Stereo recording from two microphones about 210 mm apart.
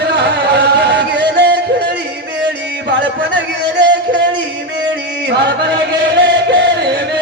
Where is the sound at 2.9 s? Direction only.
55° right (ahead or behind).